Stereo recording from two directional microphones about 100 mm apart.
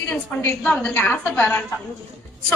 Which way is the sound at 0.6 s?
10° left (ahead or behind).